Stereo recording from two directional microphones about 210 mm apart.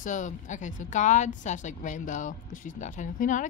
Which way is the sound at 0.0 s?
35° left (ahead or behind).